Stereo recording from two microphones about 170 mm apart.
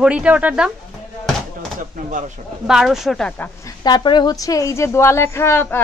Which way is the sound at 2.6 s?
5° right (ahead or behind).